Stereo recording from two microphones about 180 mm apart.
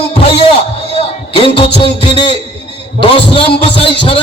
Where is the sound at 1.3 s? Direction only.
30° left (ahead or behind).